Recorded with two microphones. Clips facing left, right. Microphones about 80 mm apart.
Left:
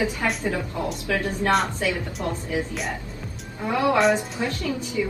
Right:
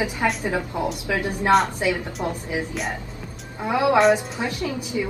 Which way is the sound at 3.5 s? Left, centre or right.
Centre.